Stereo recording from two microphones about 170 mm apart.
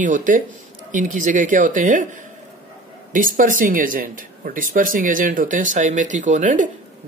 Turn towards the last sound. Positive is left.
turn(degrees=-50)  # may be behind; listen again after turning